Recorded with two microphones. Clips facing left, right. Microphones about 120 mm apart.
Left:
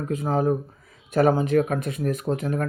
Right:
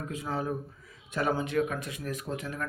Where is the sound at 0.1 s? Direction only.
45° left (ahead or behind).